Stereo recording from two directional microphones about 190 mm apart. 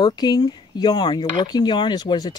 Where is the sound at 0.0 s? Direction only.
20° left (ahead or behind).